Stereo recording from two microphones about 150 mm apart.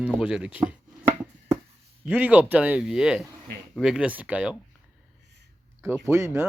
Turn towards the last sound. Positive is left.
turn(degrees=-15)  # may be behind; listen again after turning